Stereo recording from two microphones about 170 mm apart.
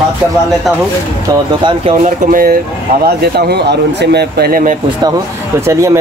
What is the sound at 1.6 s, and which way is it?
Speech, 35° right (ahead or behind).